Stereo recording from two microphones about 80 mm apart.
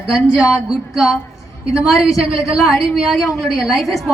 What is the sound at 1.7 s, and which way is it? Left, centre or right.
A woman's voice, centre.